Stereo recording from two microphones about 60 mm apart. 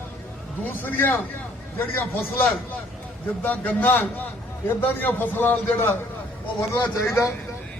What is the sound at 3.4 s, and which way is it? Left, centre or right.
A man's voice, left.